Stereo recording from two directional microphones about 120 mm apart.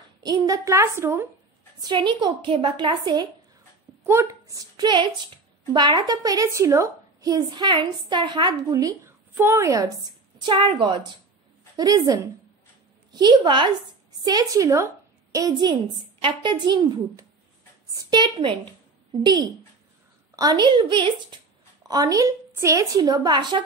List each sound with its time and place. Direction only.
0.2 s a woman's voice: 30° right (ahead or behind)
1.8 s a woman's voice: 40° right (ahead or behind)
4.0 s a woman's voice: 20° right (ahead or behind)
10.4 s a woman's voice: 40° right (ahead or behind)
14.2 s a woman's voice: 30° right (ahead or behind)
15.9 s a woman's voice: 40° right (ahead or behind)